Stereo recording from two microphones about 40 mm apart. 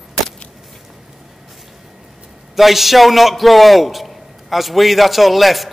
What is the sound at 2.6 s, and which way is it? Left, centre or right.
A man's voice, centre.